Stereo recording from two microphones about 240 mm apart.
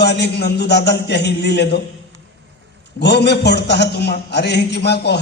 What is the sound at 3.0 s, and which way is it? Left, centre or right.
A man's voice, left.